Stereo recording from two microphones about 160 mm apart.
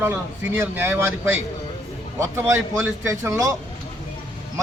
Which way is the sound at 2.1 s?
15° right (ahead or behind).